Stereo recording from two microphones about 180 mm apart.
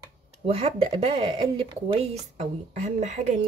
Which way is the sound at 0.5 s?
30° right (ahead or behind).